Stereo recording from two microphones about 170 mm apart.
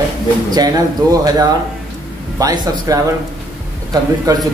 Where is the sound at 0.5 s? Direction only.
20° right (ahead or behind).